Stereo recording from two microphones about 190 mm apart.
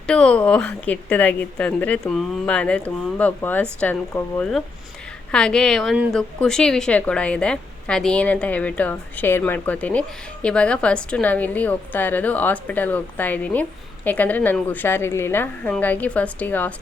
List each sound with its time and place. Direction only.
0.1 s a woman's voice: 5° left (ahead or behind)